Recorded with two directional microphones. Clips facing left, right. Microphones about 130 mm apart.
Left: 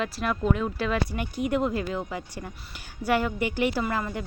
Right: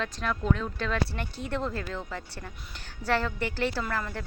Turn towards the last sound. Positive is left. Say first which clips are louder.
# left 4 dB
turn(degrees=15)  # may be behind; listen again after turning